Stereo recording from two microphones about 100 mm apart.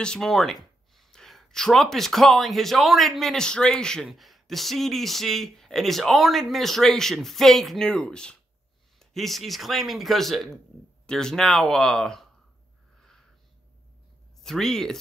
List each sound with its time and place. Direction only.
0.0 s speech: 5° left (ahead or behind)
14.4 s speech: 5° left (ahead or behind)